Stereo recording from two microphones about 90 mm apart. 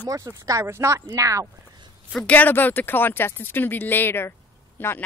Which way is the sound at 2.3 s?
20° left (ahead or behind).